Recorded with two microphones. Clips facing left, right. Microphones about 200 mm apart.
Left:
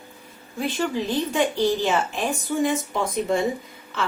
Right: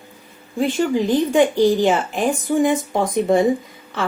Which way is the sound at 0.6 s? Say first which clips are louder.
Right 7 dB; 50° right (ahead or behind).